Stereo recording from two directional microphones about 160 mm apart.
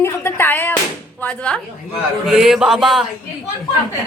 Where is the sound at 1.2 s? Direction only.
10° left (ahead or behind).